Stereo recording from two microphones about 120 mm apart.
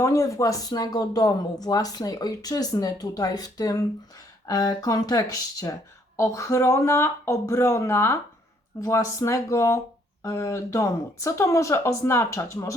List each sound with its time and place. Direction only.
0.0 s speech: 25° left (ahead or behind)